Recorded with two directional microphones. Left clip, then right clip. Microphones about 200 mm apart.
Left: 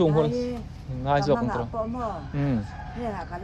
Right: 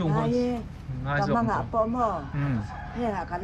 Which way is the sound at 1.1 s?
20° left (ahead or behind).